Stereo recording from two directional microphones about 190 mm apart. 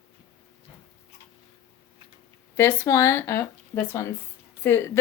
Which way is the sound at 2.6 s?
10° left (ahead or behind).